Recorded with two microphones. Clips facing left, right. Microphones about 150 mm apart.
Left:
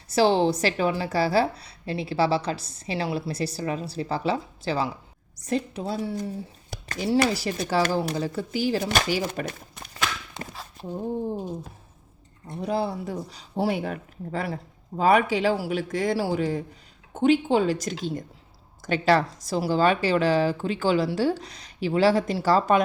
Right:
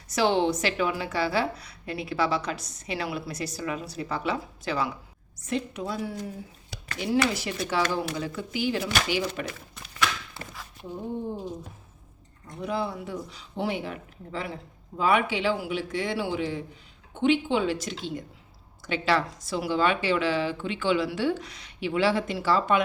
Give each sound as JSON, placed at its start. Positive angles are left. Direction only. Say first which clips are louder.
{"t": 0.1, "sound": "a woman's voice", "louder": "left 3 dB", "side_deg": 35}
{"t": 6.7, "sound": "a woman's voice", "louder": "left 3 dB", "side_deg": 40}
{"t": 10.5, "sound": "a sound", "louder": "left 3 dB", "side_deg": 35}
{"t": 12.5, "sound": "a woman's voice", "louder": "left 3 dB", "side_deg": 35}